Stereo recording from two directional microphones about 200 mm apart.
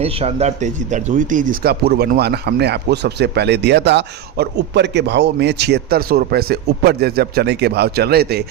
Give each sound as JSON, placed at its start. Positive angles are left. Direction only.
{"t": 0.0, "sound": "speech", "side_deg": -30}